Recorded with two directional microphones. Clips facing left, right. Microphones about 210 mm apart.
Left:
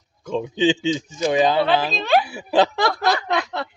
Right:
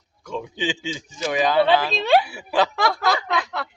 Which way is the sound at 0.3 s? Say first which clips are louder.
Left 8 dB; 25° left (ahead or behind).